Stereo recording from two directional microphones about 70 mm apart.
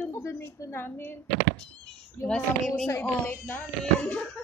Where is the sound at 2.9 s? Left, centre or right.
Left.